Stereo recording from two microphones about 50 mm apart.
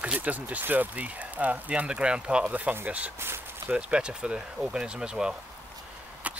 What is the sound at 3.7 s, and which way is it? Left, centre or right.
Speech, centre.